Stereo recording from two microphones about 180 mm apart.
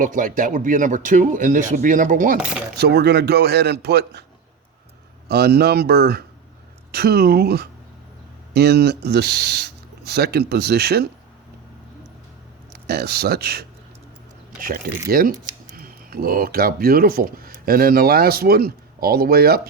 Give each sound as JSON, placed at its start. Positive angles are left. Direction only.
{"t": 0.0, "sound": "speech", "side_deg": -45}
{"t": 2.7, "sound": "a man's voice", "side_deg": -65}
{"t": 5.3, "sound": "speech", "side_deg": -60}
{"t": 12.7, "sound": "speech", "side_deg": -65}
{"t": 15.1, "sound": "speech", "side_deg": -55}